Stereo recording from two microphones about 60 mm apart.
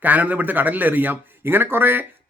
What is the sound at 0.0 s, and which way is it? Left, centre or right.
Speech, right.